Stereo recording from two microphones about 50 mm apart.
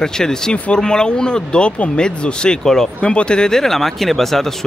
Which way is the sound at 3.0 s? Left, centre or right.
Left.